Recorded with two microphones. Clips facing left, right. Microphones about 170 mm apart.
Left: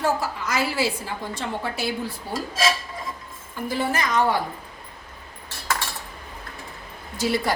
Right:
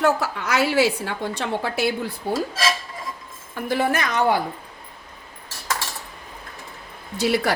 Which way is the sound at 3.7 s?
65° right (ahead or behind).